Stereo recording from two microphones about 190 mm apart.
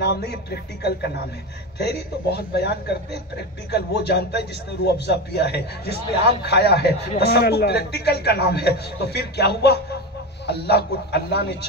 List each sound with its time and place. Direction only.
0.0 s a man's voice: 60° left (ahead or behind)